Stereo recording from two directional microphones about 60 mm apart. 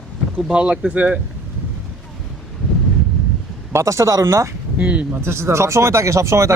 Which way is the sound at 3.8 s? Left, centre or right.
Right.